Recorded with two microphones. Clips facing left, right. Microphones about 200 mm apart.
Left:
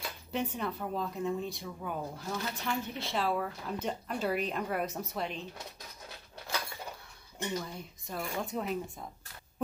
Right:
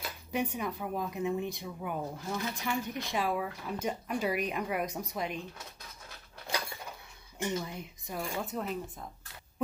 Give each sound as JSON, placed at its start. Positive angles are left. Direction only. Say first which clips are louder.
{"t": 0.0, "sound": "speech", "louder": "right 1 dB", "side_deg": -10}
{"t": 7.4, "sound": "speech", "louder": "right 2 dB", "side_deg": -15}
{"t": 8.4, "sound": "speech", "louder": "left 3 dB", "side_deg": 0}